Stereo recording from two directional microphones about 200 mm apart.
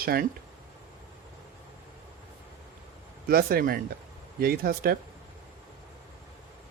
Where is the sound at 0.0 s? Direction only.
50° right (ahead or behind).